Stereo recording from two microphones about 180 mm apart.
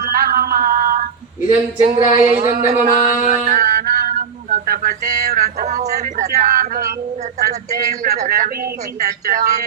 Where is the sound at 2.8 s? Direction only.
45° right (ahead or behind).